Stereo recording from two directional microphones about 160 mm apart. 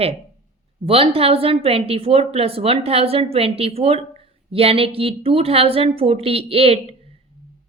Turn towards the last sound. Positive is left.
turn(degrees=-40)  # may be behind; listen again after turning